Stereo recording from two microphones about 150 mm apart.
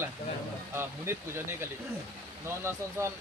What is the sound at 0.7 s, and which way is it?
Speech, 15° right (ahead or behind).